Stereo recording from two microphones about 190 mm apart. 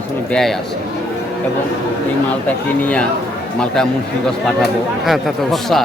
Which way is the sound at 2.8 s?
5° left (ahead or behind).